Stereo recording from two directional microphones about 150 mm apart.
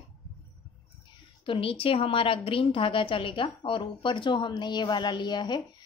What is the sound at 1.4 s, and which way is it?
A woman's voice, 35° left (ahead or behind).